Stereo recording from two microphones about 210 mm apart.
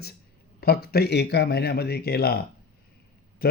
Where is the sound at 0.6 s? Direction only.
45° left (ahead or behind).